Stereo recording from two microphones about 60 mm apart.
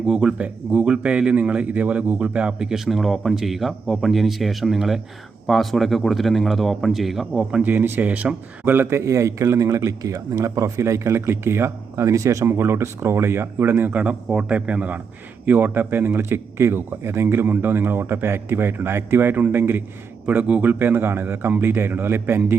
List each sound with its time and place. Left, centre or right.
0.0 s a man's voice: centre
7.6 s speech: right
8.6 s a man's voice: right
9.0 s a man's voice: right
12.5 s a man's voice: right
20.2 s a man's voice: right